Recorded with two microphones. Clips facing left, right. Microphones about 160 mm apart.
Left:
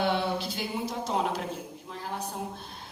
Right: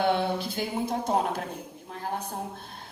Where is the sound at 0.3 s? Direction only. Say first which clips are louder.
Right 2 dB; 55° right (ahead or behind).